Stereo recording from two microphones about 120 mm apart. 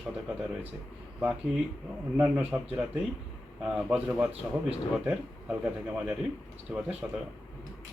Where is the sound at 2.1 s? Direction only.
10° right (ahead or behind).